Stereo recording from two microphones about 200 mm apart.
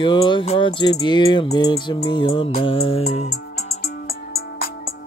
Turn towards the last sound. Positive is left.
turn(degrees=50)  # may be behind; listen again after turning